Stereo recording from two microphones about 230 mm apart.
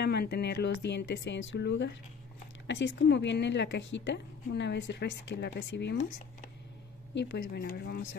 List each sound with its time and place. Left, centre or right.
0.0 s a woman's voice: left
7.2 s a woman's voice: left